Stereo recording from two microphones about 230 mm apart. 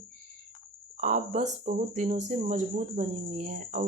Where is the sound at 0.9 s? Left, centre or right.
Right.